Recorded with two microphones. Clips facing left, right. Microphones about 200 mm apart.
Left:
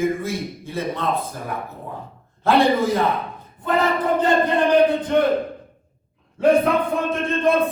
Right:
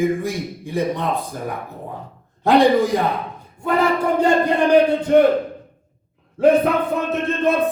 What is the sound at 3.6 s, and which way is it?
Speech, 10° right (ahead or behind).